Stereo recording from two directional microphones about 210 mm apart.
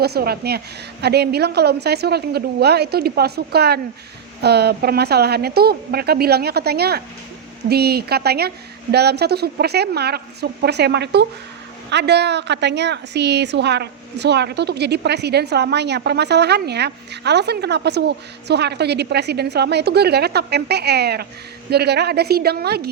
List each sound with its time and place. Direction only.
0.0 s a woman's voice: 50° right (ahead or behind)